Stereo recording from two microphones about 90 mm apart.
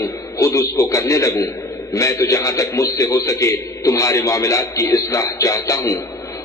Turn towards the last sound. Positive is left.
turn(degrees=35)  # may be behind; listen again after turning